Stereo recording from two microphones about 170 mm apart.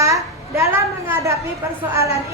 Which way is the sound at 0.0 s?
15° right (ahead or behind).